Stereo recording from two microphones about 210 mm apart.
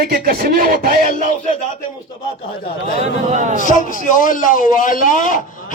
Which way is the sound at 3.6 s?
40° left (ahead or behind).